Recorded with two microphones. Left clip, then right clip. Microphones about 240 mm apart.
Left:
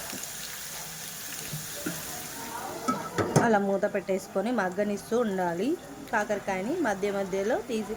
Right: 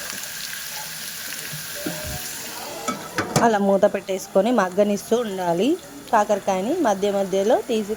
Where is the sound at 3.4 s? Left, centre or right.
Right.